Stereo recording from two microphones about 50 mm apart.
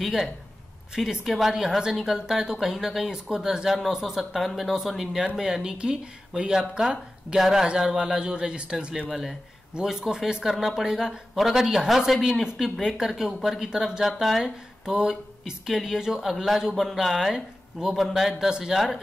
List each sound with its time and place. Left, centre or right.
0.0 s speech: centre
7.3 s speech: centre
12.1 s a man's voice: centre
14.0 s a man's voice: centre
14.4 s speech: centre
17.9 s a man's voice: centre